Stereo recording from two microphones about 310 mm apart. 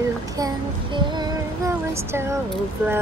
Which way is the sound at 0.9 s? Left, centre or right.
Centre.